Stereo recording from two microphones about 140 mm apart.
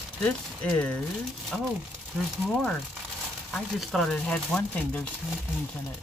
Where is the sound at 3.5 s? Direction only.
Centre (ahead or behind).